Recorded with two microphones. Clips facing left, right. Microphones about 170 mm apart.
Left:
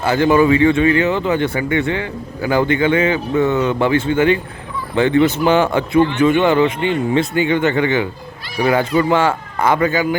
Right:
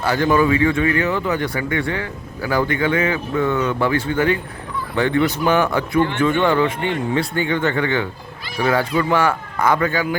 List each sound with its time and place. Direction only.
0.0 s speech: 25° left (ahead or behind)